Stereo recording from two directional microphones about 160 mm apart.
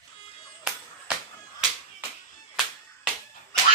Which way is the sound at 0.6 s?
5° right (ahead or behind).